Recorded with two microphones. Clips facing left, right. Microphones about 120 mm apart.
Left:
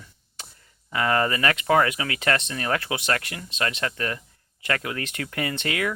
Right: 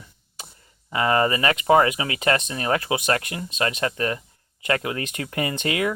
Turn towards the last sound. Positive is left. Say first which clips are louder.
# right 3 dB
turn(degrees=-25)  # may be behind; listen again after turning